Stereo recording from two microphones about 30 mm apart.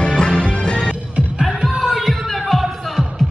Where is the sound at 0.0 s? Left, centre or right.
Left.